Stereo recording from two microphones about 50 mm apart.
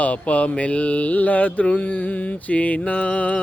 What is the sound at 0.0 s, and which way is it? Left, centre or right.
Mantra, left.